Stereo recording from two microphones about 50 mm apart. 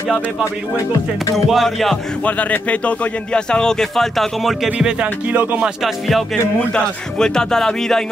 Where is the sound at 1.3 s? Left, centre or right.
Centre.